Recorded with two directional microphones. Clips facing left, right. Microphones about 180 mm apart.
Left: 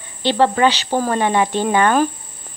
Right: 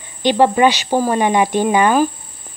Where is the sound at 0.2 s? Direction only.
15° right (ahead or behind).